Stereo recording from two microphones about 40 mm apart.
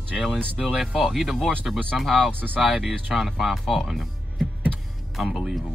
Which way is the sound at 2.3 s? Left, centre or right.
Right.